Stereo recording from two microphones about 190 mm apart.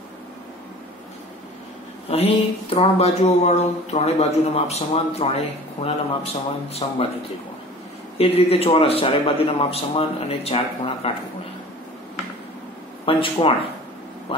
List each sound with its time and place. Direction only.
2.0 s speech: 30° left (ahead or behind)
8.2 s speech: 30° left (ahead or behind)
13.0 s speech: 30° left (ahead or behind)